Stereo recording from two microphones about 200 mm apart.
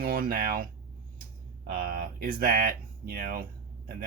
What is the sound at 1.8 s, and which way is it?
Speech, 45° right (ahead or behind).